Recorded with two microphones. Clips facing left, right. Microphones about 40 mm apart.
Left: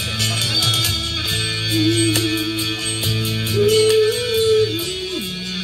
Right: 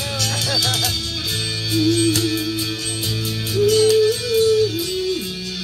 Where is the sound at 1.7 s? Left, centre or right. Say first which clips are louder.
Right 1 dB; left.